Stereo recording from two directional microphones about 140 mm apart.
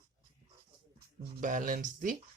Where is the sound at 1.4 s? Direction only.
70° right (ahead or behind).